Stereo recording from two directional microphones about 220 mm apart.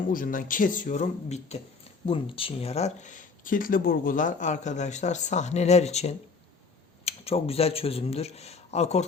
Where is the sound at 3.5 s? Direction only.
40° left (ahead or behind).